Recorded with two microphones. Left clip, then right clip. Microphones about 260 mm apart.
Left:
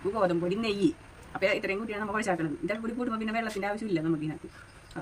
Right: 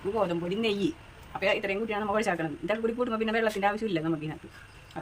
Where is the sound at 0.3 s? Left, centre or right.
Centre.